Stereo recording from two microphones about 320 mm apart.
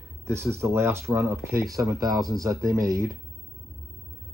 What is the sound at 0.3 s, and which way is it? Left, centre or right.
Speech, centre.